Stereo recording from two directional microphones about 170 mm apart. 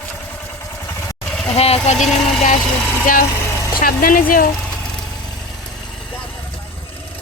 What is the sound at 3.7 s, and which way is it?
Speech, 55° left (ahead or behind).